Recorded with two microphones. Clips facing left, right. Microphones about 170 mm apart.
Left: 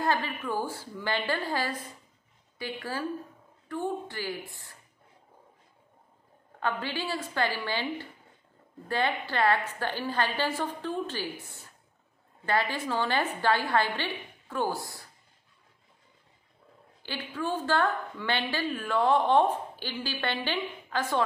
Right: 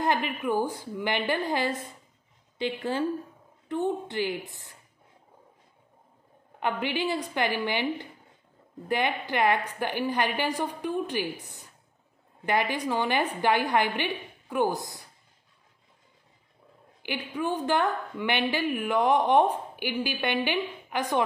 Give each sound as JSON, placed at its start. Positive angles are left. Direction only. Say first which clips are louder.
{"t": 0.0, "sound": "a woman's voice", "louder": "right 2 dB", "side_deg": -15}
{"t": 6.6, "sound": "a woman's voice", "louder": "right 4 dB", "side_deg": -20}
{"t": 17.0, "sound": "a woman's voice", "louder": "right 3 dB", "side_deg": -15}